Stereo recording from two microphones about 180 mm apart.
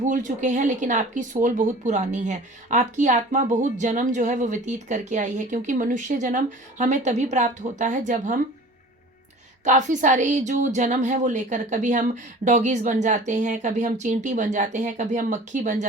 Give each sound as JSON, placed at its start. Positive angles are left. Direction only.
{"t": 0.0, "sound": "speech", "side_deg": -45}
{"t": 9.6, "sound": "speech", "side_deg": -45}